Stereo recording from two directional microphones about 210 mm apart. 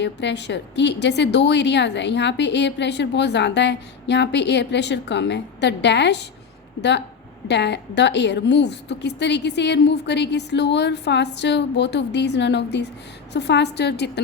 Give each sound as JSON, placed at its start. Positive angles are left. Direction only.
{"t": 0.0, "sound": "a woman's voice", "side_deg": 55}
{"t": 7.4, "sound": "a woman's voice", "side_deg": 55}